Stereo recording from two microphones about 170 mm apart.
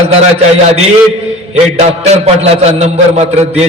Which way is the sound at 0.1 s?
35° right (ahead or behind).